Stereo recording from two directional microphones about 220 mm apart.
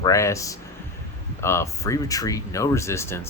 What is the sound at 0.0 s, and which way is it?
Speech, 15° left (ahead or behind).